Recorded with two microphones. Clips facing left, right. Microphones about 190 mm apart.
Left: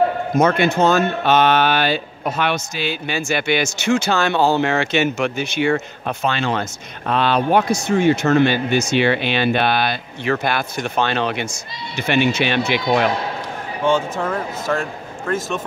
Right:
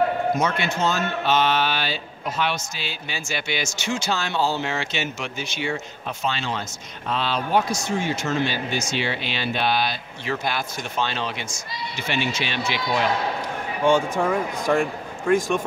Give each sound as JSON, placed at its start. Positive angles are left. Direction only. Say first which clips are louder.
{"t": 0.4, "sound": "speech", "louder": "left 8 dB", "side_deg": 55}
{"t": 13.8, "sound": "a man's voice", "louder": "even", "side_deg": -10}